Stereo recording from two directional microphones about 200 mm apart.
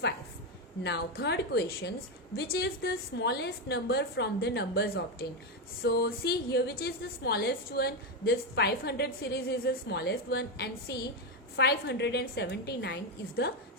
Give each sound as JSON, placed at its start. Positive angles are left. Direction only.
{"t": 0.9, "sound": "a woman's voice", "side_deg": 55}